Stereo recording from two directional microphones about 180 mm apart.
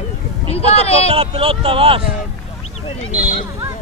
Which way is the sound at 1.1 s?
30° right (ahead or behind).